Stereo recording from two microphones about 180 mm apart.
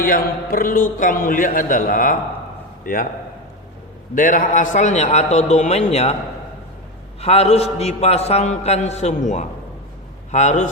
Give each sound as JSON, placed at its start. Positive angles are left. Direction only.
{"t": 0.0, "sound": "a man's voice", "side_deg": 50}
{"t": 4.1, "sound": "a man's voice", "side_deg": 50}
{"t": 7.2, "sound": "a man's voice", "side_deg": 35}